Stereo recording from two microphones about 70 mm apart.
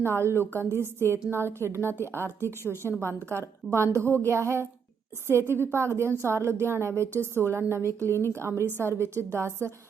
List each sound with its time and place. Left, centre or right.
0.0 s a woman's voice: right
1.9 s speech: left
2.2 s a woman's voice: right
8.1 s speech: left
8.4 s a woman's voice: right